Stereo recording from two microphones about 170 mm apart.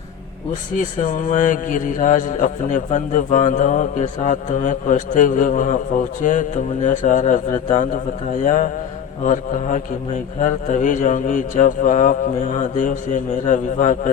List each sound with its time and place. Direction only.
0.8 s a man's voice: 50° left (ahead or behind)